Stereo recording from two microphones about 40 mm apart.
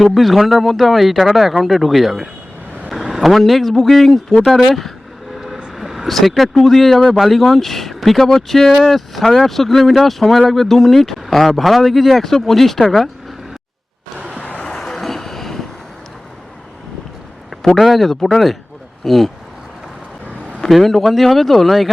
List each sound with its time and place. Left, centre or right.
0.0 s speech: centre
5.7 s vehicle: centre
6.1 s speech: centre
14.4 s vehicle: left
14.7 s vehicle: centre
17.7 s speech: centre
20.7 s speech: centre